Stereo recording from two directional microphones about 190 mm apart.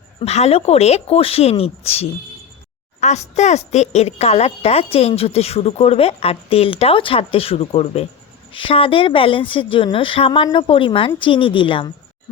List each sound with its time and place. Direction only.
0.2 s a woman's voice: 35° left (ahead or behind)